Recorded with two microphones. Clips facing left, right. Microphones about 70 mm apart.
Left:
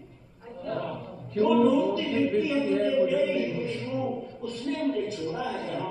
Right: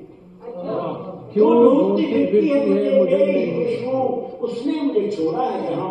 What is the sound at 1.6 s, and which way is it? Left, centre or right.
Music, right.